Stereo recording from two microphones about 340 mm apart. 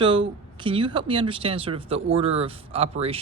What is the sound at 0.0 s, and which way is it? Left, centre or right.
Speech, centre.